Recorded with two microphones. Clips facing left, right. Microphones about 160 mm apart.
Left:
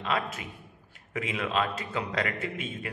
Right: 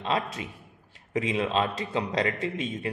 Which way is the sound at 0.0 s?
30° right (ahead or behind).